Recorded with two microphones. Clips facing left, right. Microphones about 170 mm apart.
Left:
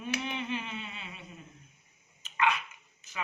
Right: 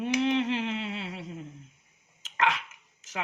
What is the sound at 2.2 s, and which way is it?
Dog, 90° right.